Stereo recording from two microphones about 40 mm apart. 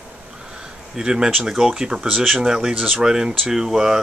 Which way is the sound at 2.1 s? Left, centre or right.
Centre.